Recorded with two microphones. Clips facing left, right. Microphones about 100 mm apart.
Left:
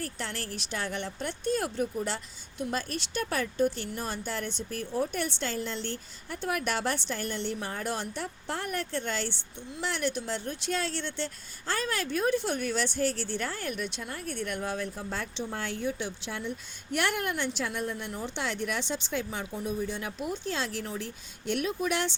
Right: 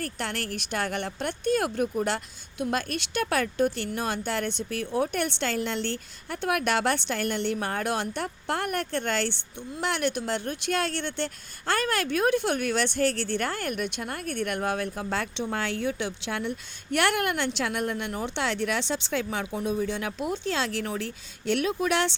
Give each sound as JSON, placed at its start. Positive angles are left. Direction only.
{"t": 0.0, "sound": "speech", "side_deg": -60}